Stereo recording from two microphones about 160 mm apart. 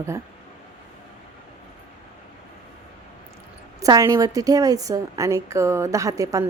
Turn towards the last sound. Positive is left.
turn(degrees=-20)  # may be behind; listen again after turning